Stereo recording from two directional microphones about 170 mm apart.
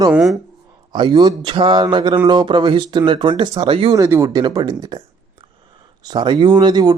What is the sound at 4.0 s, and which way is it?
Speech, 20° right (ahead or behind).